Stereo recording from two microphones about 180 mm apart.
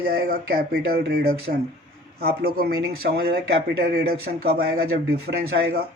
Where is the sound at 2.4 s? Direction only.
60° right (ahead or behind).